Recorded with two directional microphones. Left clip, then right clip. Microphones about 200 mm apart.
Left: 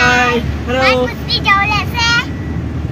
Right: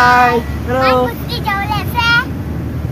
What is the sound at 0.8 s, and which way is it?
Child singing, 15° left (ahead or behind).